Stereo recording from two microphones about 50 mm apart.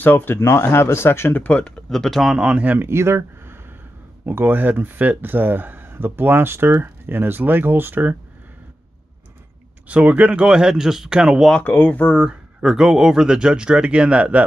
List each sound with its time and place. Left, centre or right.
0.0 s speech: left
0.4 s speech: left
1.3 s speech: left
1.9 s speech: centre
2.3 s speech: right
2.8 s speech: right
4.3 s speech: right
9.8 s speech: right
11.6 s speech: left
12.3 s speech: centre